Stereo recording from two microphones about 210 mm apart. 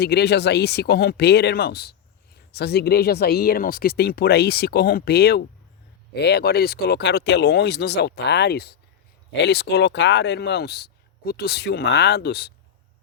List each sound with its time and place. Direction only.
0.0 s speech: 50° left (ahead or behind)